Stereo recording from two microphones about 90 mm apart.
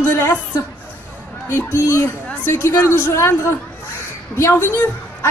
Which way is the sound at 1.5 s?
30° left (ahead or behind).